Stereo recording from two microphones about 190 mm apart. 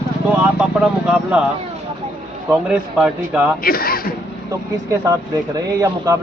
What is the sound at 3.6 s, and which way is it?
Speech, 50° left (ahead or behind).